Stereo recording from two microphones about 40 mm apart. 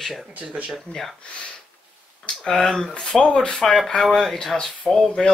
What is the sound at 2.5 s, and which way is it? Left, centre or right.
Speech, centre.